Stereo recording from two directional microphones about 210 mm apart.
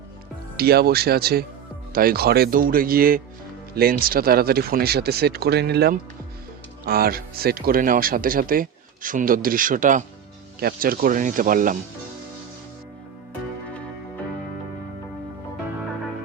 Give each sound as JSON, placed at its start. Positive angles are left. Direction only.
{"t": 0.5, "sound": "speech", "side_deg": -45}